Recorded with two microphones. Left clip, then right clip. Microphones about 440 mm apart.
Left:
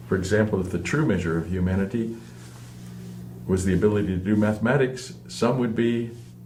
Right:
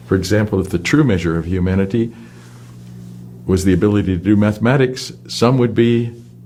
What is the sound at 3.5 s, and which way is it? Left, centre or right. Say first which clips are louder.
Speech: right 7 dB; right.